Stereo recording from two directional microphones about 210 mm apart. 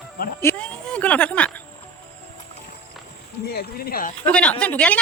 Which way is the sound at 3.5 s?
45° left (ahead or behind).